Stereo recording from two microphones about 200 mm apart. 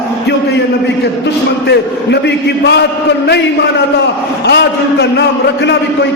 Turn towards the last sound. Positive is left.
turn(degrees=60)  # may be behind; listen again after turning